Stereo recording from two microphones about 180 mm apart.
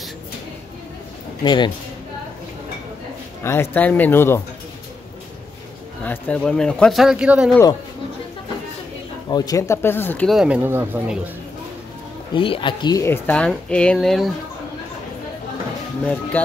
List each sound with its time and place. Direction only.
1.4 s speech: 25° left (ahead or behind)
3.4 s speech: 10° left (ahead or behind)
6.0 s speech: 10° left (ahead or behind)
9.3 s speech: 20° left (ahead or behind); by 11.1 s 10° right (ahead or behind)
12.4 s speech: 30° left (ahead or behind); by 14.3 s centre (ahead or behind)
16.1 s speech: 5° left (ahead or behind)